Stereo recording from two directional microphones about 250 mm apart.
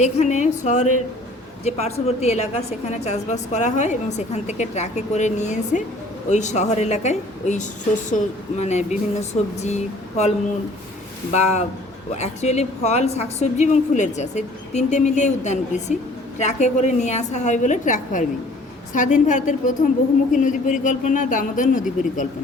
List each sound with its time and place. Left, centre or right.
0.0 s a woman's voice: left